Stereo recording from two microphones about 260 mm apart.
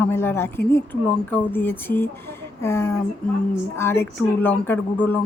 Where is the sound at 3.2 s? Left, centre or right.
Centre.